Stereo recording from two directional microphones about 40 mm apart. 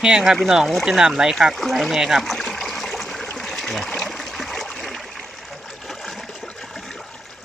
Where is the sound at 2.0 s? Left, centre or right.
Centre.